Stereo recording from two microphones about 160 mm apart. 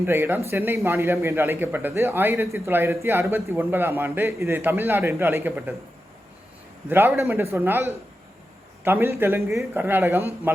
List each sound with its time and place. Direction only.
0.0 s a man's voice: 15° right (ahead or behind)
6.8 s a man's voice: 15° right (ahead or behind)